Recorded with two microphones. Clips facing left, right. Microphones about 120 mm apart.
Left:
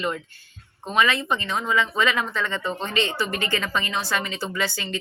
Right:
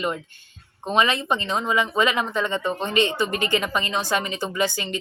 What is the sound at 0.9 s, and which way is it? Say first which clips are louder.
Speech: right 1 dB; 20° right (ahead or behind).